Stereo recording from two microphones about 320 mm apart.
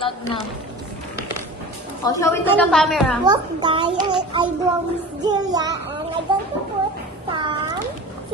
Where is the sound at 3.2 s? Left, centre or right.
Centre.